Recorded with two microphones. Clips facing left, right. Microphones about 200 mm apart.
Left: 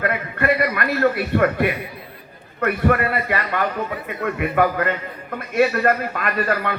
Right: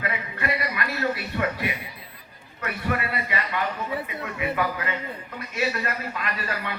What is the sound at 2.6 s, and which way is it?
A man's voice, 55° left (ahead or behind).